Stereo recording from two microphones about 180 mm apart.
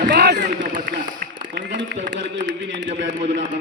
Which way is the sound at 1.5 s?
90° right.